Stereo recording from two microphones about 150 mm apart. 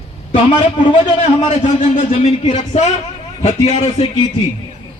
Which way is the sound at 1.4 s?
50° left (ahead or behind).